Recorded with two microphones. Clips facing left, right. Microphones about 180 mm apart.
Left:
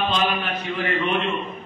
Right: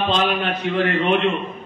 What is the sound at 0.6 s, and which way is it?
Speech, 65° right (ahead or behind).